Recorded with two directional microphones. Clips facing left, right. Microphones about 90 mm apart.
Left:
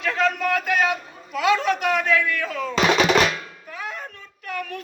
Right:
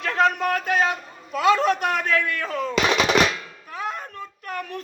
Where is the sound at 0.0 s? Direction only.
40° right (ahead or behind).